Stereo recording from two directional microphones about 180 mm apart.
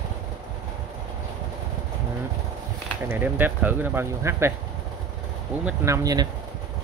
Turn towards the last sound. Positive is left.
turn(degrees=-20)  # may be behind; listen again after turning